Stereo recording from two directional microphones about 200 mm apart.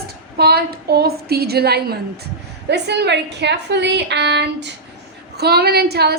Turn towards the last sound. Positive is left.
turn(degrees=-55)  # may be behind; listen again after turning